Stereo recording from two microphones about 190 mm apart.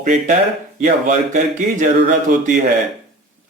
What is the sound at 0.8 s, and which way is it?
Speech, 40° right (ahead or behind).